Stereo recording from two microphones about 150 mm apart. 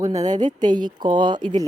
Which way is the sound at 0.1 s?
50° right (ahead or behind).